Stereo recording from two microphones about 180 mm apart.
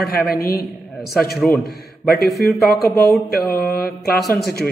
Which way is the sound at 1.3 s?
5° left (ahead or behind).